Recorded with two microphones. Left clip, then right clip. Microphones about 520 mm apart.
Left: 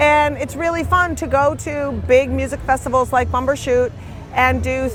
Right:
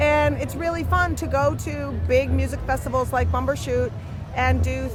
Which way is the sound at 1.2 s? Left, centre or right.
Left.